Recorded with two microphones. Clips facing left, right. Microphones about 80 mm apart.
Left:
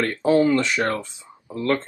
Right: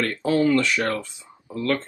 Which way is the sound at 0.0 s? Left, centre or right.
Left.